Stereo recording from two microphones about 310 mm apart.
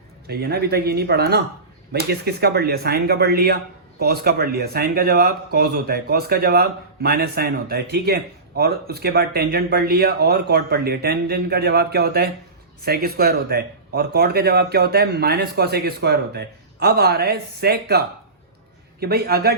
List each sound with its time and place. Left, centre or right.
0.3 s speech: right